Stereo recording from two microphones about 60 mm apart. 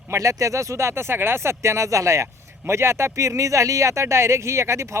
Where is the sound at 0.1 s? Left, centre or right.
Right.